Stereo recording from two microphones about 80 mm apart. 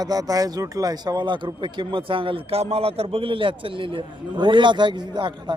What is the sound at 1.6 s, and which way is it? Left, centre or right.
A man's voice, right.